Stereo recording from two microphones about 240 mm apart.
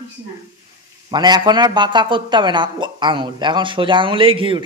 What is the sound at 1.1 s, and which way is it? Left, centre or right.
Speech, centre.